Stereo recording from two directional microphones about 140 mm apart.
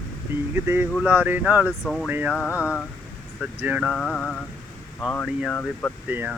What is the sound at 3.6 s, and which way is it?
Speech, 10° right (ahead or behind).